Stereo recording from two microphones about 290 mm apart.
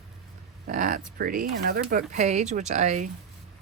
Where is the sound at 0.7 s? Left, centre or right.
Right.